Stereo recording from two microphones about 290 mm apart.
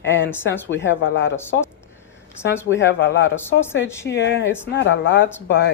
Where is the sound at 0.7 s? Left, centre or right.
Left.